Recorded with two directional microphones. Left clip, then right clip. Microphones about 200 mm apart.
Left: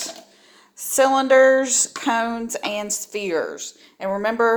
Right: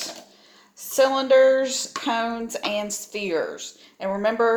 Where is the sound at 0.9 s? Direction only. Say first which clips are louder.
Left 2 dB; 30° left (ahead or behind).